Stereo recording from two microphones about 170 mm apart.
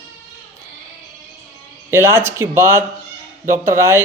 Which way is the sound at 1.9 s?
15° right (ahead or behind).